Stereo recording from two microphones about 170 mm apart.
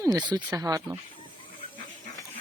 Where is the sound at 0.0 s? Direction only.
25° right (ahead or behind).